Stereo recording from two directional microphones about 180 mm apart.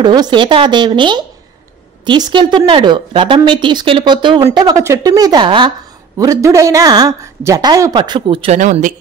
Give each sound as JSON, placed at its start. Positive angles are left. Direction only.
{"t": 0.0, "sound": "speech", "side_deg": -25}